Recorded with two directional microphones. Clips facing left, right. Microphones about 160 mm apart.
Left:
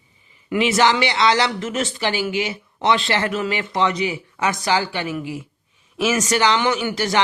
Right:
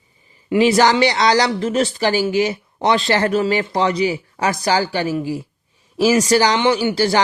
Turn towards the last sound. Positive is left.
turn(degrees=-30)  # may be behind; listen again after turning